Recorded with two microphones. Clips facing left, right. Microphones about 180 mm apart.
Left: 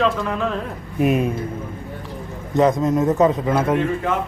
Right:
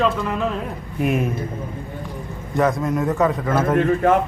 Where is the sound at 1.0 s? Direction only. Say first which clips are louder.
Left 3 dB; 20° left (ahead or behind).